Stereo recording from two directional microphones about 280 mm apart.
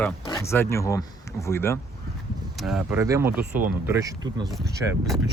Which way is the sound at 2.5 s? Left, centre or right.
Centre.